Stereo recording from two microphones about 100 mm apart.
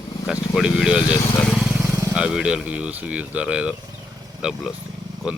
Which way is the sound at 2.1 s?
10° right (ahead or behind).